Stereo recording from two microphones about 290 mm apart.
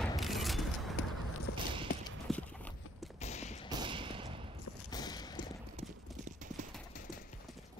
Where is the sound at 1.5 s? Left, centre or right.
Left.